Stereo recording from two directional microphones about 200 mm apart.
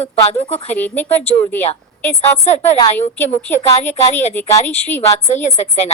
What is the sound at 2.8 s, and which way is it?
Speech, 10° left (ahead or behind).